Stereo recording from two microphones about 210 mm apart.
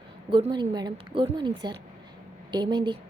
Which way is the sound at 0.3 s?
25° right (ahead or behind).